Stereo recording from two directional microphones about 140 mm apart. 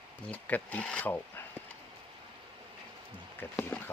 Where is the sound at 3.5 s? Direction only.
15° left (ahead or behind).